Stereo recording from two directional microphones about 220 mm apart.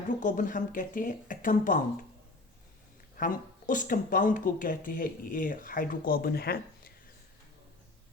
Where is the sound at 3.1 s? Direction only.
40° left (ahead or behind).